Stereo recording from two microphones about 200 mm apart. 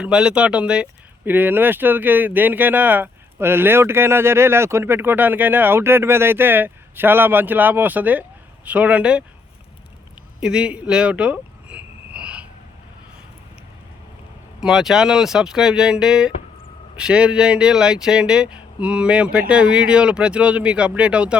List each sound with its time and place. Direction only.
0.0 s speech: 5° right (ahead or behind)
10.4 s a sound: 5° right (ahead or behind)
14.6 s speech: centre (ahead or behind)